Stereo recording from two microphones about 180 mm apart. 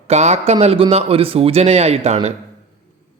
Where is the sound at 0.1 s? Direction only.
40° right (ahead or behind).